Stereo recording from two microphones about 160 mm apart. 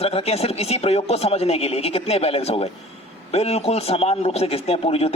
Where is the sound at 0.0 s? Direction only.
40° left (ahead or behind).